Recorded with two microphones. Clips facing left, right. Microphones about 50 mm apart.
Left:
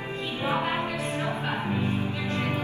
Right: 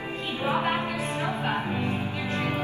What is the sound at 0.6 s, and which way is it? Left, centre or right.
Music, right.